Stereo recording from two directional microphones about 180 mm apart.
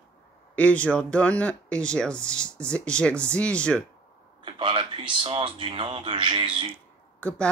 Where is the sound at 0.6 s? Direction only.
5° left (ahead or behind).